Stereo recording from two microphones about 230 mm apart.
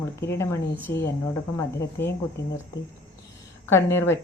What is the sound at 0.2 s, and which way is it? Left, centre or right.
Speech, centre.